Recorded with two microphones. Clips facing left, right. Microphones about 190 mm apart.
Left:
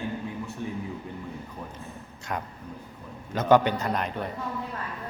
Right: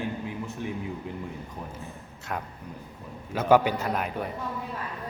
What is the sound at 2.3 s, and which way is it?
A man's voice, centre (ahead or behind).